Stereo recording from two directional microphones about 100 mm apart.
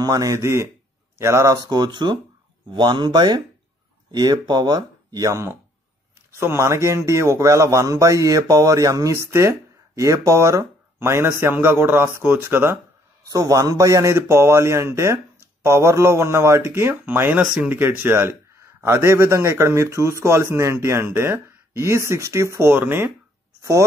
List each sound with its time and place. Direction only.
0.0 s speech: 40° right (ahead or behind)
1.6 s speech: 45° right (ahead or behind)
6.5 s speech: 30° right (ahead or behind)
13.3 s speech: 40° right (ahead or behind); by 23.1 s 20° right (ahead or behind)